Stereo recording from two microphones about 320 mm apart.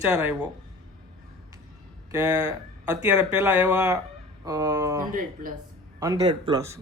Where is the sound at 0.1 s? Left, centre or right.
Centre.